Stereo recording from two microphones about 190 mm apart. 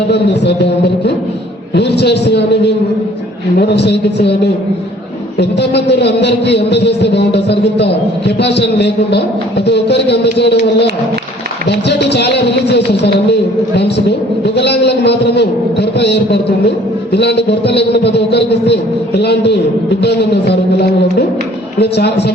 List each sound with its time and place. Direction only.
0.1 s a man's voice: 65° left (ahead or behind)
5.4 s a man's voice: 60° left (ahead or behind)